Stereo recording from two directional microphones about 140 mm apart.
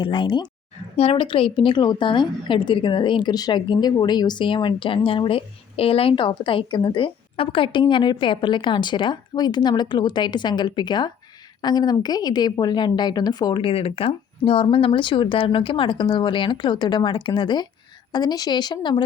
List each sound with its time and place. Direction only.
0.0 s a woman's voice: 35° left (ahead or behind)